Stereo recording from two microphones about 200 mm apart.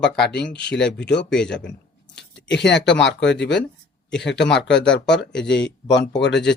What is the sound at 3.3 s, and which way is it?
Speech, 60° left (ahead or behind).